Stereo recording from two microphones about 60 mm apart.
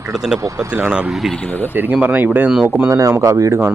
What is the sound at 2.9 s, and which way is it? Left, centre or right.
Speech, right.